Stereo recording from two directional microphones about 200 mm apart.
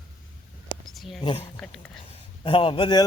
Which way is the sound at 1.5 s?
5° left (ahead or behind).